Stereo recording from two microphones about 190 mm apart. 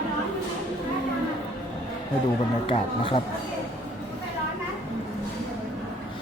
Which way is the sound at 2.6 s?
30° left (ahead or behind).